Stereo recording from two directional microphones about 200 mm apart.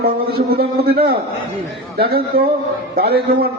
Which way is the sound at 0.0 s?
50° right (ahead or behind).